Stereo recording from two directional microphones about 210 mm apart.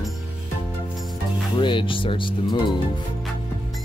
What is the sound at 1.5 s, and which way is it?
Speech, 25° left (ahead or behind).